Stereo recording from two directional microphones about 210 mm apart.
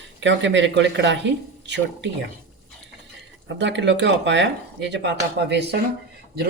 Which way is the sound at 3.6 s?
60° right (ahead or behind).